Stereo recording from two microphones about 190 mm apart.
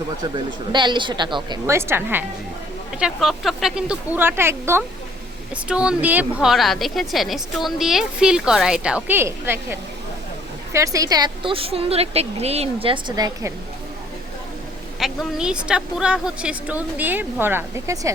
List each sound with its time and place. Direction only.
0.7 s a woman's voice: 25° right (ahead or behind)
1.6 s a woman's voice: 15° right (ahead or behind)
14.9 s a woman's voice: centre (ahead or behind); by 18.1 s 15° right (ahead or behind)